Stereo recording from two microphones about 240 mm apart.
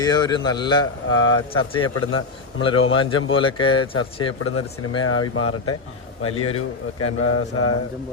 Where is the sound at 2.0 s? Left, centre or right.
Left.